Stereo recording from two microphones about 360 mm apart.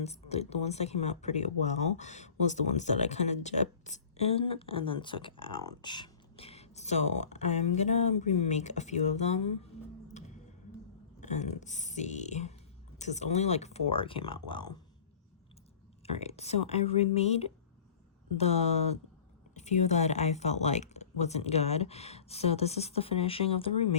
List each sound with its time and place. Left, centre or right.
0.0 s speech: centre
10.2 s a sound: centre
11.2 s speech: centre
16.0 s speech: centre